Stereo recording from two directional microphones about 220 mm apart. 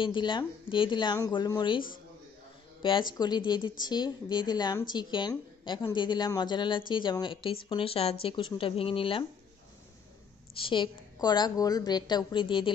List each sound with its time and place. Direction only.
0.0 s speech: 20° left (ahead or behind)
2.8 s speech: 20° left (ahead or behind)
10.6 s speech: 20° left (ahead or behind)